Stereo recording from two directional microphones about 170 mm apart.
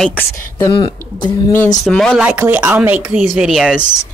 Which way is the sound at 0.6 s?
25° left (ahead or behind).